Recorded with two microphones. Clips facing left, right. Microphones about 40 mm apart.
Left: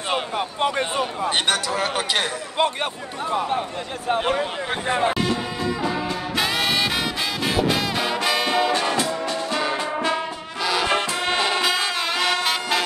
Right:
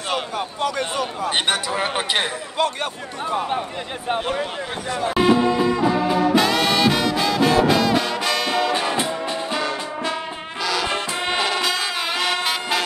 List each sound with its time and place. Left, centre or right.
0.6 s speech: left
1.5 s speech: centre
2.5 s speech: left
3.3 s speech: centre
4.8 s speech: left
5.1 s music: centre
6.3 s music: centre
8.9 s music: right
10.6 s music: centre